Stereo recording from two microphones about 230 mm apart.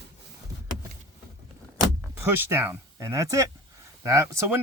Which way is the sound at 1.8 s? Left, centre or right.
Centre.